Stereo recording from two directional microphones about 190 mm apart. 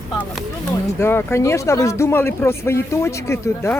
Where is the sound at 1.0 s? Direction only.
10° left (ahead or behind).